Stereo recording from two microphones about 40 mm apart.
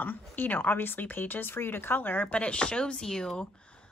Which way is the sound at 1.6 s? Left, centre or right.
Left.